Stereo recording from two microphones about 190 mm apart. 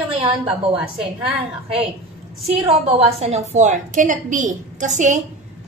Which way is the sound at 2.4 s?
30° right (ahead or behind).